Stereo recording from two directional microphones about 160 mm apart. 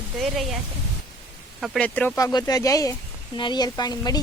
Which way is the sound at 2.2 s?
25° left (ahead or behind).